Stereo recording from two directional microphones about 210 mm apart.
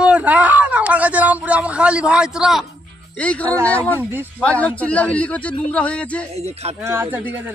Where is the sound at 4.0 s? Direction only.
10° right (ahead or behind).